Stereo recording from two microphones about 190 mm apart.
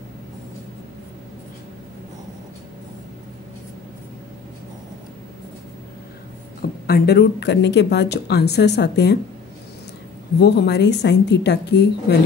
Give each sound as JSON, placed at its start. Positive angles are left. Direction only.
{"t": 6.9, "sound": "a woman's voice", "side_deg": 55}
{"t": 10.4, "sound": "a woman's voice", "side_deg": 60}